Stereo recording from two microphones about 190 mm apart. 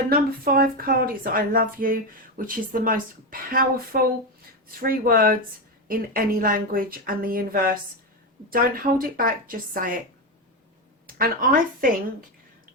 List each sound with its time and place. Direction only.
0.1 s speech: 50° right (ahead or behind)
11.0 s a woman's voice: 50° right (ahead or behind)